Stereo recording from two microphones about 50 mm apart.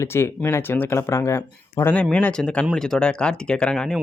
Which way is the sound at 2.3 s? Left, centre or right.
Centre.